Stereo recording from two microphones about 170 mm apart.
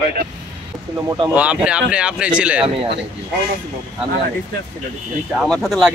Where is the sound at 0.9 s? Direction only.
20° right (ahead or behind).